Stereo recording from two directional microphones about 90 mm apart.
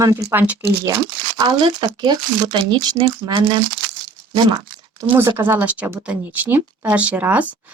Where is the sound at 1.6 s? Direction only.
55° right (ahead or behind).